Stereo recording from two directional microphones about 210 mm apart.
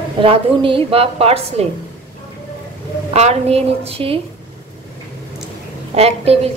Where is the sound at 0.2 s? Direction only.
25° right (ahead or behind).